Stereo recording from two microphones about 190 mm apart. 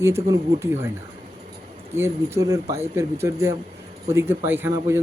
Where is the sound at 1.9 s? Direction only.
15° right (ahead or behind).